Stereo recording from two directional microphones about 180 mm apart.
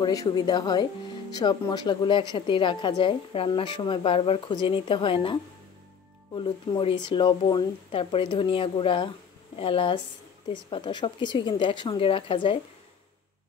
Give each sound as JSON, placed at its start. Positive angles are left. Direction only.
{"t": 0.0, "sound": "a woman's voice", "side_deg": 20}